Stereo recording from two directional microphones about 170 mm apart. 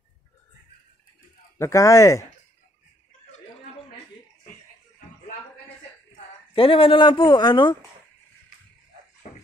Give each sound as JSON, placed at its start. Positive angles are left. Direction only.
{"t": 1.6, "sound": "speech", "side_deg": 20}
{"t": 6.5, "sound": "speech", "side_deg": 30}